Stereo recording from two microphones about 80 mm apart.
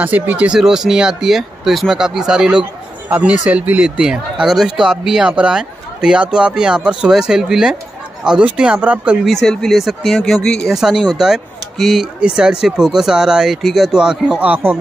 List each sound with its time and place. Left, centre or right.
0.0 s speech: centre
0.6 s speech: centre
9.2 s speech: centre
10.7 s speech: centre
14.5 s speech: right